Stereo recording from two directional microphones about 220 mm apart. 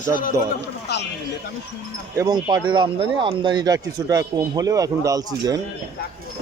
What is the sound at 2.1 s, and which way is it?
Speech, 15° right (ahead or behind).